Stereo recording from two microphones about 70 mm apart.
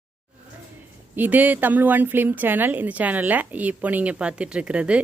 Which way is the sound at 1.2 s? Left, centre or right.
Right.